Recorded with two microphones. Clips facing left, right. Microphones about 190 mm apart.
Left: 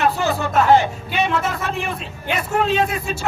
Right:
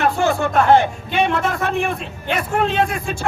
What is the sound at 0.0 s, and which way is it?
A man's voice, 55° right (ahead or behind).